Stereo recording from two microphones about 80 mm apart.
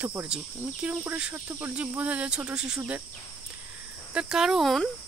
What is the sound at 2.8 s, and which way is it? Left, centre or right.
Cricket, right.